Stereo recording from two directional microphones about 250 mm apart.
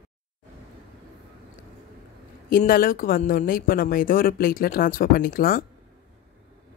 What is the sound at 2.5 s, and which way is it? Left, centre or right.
Speech, left.